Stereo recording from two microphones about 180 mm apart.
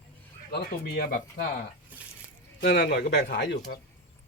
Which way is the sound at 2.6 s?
70° left (ahead or behind).